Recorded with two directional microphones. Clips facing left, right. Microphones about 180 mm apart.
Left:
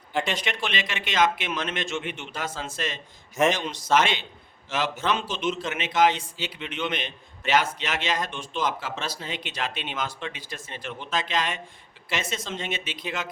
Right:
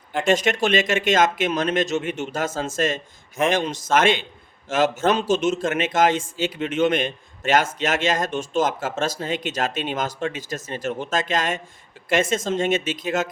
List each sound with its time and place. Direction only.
0.3 s a man's voice: 45° right (ahead or behind)